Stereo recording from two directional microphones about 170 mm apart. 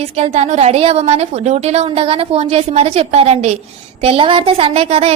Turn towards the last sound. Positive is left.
turn(degrees=-35)  # may be behind; listen again after turning